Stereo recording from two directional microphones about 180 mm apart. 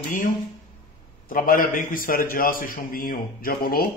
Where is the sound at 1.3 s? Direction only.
50° left (ahead or behind).